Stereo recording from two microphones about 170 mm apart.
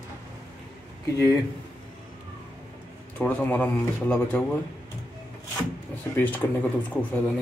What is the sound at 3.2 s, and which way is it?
A man's voice, 10° left (ahead or behind).